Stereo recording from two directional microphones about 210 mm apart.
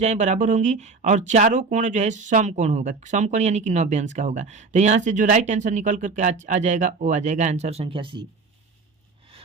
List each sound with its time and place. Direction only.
0.0 s speech: 35° right (ahead or behind)